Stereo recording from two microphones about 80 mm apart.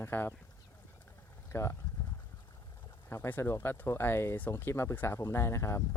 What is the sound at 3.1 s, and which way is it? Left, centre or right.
Speech, left.